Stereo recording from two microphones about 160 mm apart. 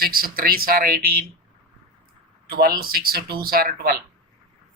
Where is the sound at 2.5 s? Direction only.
70° right (ahead or behind).